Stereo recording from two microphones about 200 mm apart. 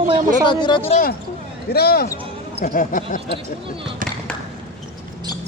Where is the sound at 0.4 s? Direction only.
25° left (ahead or behind).